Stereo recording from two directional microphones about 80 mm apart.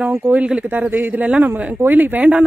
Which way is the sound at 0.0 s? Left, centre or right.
Right.